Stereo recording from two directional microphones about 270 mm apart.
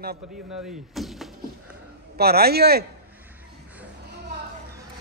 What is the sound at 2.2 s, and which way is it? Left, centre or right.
Speech, right.